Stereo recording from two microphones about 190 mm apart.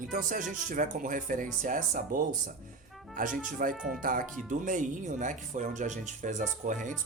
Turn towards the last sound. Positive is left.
turn(degrees=-40)  # may be behind; listen again after turning